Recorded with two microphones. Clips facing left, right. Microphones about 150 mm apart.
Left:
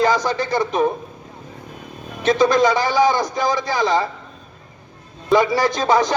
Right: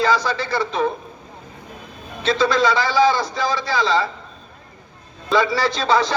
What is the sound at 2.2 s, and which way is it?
Speech, 20° left (ahead or behind).